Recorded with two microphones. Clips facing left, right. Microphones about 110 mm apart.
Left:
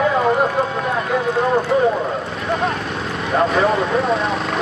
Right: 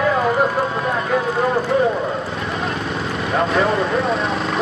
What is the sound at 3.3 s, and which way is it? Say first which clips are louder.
Speech: left 2 dB; centre (ahead or behind).